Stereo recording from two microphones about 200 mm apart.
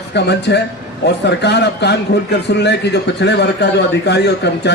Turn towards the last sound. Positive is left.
turn(degrees=60)  # may be behind; listen again after turning